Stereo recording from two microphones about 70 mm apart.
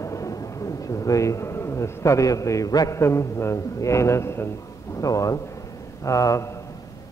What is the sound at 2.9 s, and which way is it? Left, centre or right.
A man's voice, left.